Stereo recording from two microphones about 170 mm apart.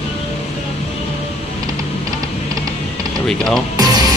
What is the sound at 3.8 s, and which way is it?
Music, 25° right (ahead or behind).